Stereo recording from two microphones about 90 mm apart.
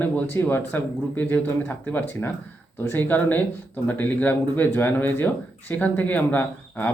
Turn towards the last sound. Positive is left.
turn(degrees=20)  # may be behind; listen again after turning